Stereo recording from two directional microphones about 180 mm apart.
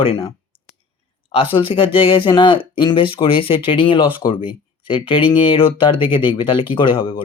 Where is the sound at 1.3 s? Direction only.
30° left (ahead or behind).